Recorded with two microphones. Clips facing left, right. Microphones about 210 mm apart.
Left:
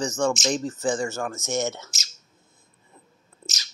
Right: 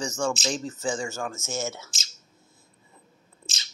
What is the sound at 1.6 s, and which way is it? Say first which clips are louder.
Speech: left 5 dB; 20° left (ahead or behind).